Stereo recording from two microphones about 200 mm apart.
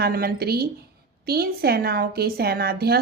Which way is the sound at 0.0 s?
50° right (ahead or behind).